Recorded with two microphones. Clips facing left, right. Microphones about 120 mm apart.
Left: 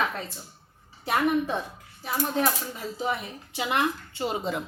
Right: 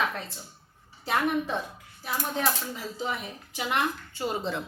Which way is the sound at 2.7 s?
25° left (ahead or behind).